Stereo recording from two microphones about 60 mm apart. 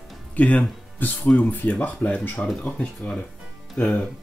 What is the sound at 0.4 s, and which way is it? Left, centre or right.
Speech, left.